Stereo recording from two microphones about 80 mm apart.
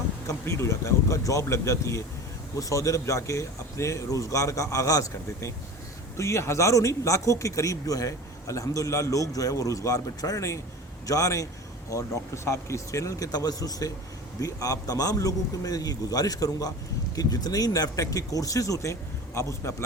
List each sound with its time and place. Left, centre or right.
0.3 s a man's voice: left